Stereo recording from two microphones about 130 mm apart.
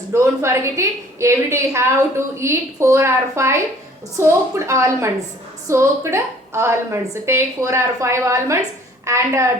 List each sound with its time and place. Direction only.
0.1 s a woman's voice: 20° right (ahead or behind)